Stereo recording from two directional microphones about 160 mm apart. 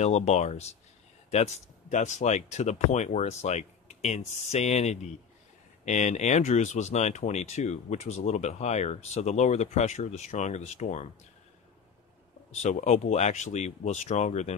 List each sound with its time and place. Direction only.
0.0 s speech: 45° left (ahead or behind)
12.6 s speech: 45° left (ahead or behind)